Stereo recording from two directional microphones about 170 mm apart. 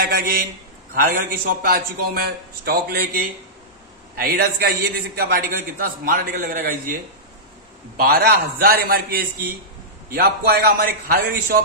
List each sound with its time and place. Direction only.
0.0 s a man's voice: 65° right (ahead or behind)
8.0 s a man's voice: 65° right (ahead or behind)